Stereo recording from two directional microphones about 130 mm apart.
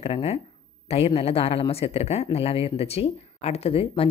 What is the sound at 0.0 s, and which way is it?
Speech, 50° left (ahead or behind).